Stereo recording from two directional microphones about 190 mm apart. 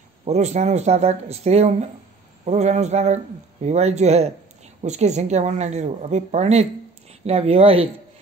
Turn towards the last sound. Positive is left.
turn(degrees=-30)  # may be behind; listen again after turning